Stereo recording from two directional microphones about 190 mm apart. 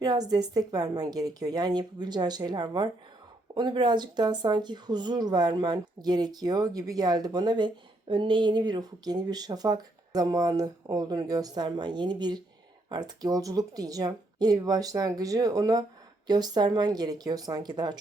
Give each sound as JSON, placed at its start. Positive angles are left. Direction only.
{"t": 0.0, "sound": "speech", "side_deg": -20}